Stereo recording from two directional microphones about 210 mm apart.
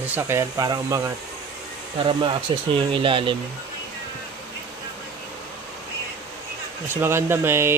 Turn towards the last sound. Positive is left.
turn(degrees=-10)  # may be behind; listen again after turning